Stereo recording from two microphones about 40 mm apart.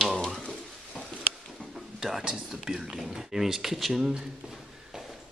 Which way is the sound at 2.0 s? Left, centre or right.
Centre.